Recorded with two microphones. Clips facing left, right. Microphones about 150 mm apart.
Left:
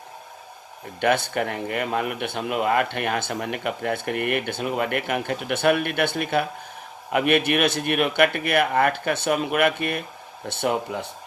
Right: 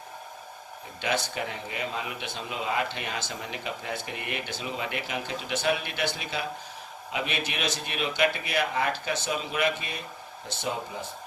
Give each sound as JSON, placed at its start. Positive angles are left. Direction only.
{"t": 1.0, "sound": "a man's voice", "side_deg": 55}